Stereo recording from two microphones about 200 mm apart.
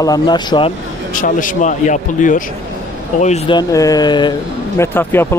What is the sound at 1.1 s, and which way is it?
Speech, 40° left (ahead or behind).